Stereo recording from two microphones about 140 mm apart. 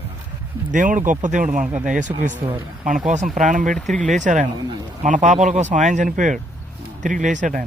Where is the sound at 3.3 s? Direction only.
65° right (ahead or behind).